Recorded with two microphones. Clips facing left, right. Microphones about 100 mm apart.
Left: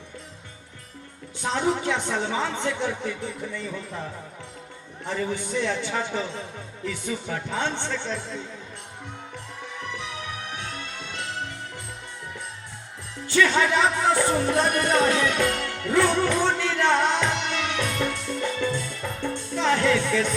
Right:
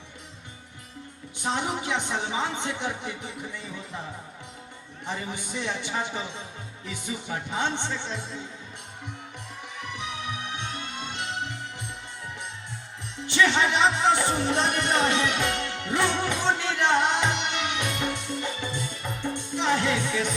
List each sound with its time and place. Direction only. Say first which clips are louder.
1.5 s speech: left 4 dB; 20° right (ahead or behind)
5.0 s speech: left 6 dB; 15° right (ahead or behind)
10.5 s music: even; 20° right (ahead or behind)
13.2 s speech: left 2 dB; 20° right (ahead or behind)
15.4 s music: left 3 dB; 20° right (ahead or behind)